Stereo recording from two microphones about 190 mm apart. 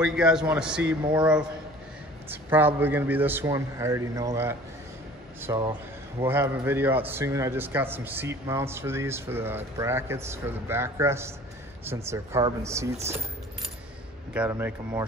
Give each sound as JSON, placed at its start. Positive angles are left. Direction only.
{"t": 0.0, "sound": "a man's voice", "side_deg": -5}
{"t": 14.5, "sound": "a man's voice", "side_deg": -10}